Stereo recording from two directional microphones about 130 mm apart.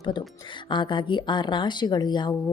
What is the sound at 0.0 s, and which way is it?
Speech, 35° left (ahead or behind).